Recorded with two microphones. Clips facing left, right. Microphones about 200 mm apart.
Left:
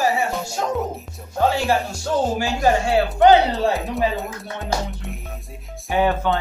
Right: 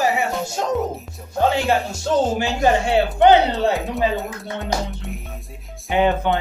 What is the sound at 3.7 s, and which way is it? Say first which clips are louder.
Music: right 1 dB; centre (ahead or behind).